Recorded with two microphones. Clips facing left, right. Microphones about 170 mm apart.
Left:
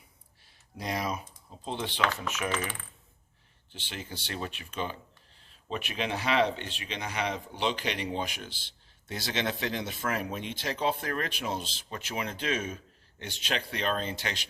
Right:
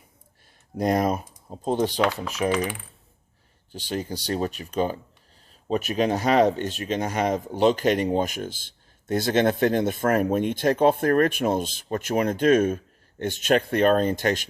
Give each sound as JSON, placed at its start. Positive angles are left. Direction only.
{"t": 0.8, "sound": "speech", "side_deg": -50}
{"t": 2.5, "sound": "coin", "side_deg": -10}
{"t": 3.7, "sound": "speech", "side_deg": -40}